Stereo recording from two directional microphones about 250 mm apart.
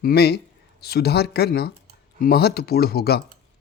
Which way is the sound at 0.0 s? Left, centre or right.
Left.